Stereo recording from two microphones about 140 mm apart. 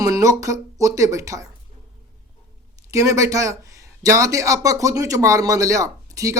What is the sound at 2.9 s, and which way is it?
Speech, 25° right (ahead or behind).